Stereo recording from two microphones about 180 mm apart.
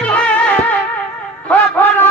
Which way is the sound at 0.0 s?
5° left (ahead or behind).